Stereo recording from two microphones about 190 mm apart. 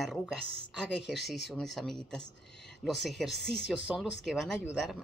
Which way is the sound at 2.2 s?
65° left (ahead or behind).